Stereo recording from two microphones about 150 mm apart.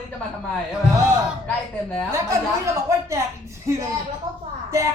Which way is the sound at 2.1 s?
20° right (ahead or behind).